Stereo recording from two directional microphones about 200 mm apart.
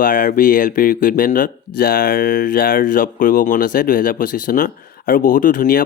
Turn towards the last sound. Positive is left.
turn(degrees=45)  # may be behind; listen again after turning